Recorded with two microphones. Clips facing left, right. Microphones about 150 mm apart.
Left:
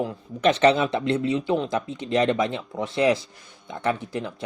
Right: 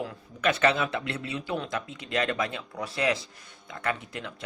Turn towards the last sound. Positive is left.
turn(degrees=30)  # may be behind; listen again after turning